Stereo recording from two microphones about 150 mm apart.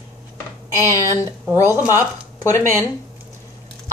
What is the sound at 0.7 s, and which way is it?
Speech, 20° left (ahead or behind).